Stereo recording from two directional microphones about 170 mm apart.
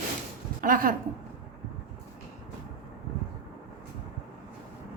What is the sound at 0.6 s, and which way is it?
Speech, 55° right (ahead or behind).